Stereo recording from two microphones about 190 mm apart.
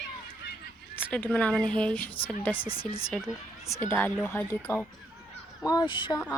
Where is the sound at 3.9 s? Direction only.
10° left (ahead or behind).